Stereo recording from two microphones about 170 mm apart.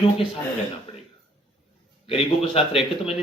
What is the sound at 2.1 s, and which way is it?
Speech, 30° left (ahead or behind).